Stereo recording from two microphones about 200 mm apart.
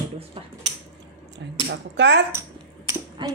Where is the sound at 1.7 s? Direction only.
60° right (ahead or behind).